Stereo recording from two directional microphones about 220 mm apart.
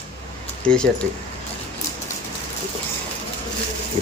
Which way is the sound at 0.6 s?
5° left (ahead or behind).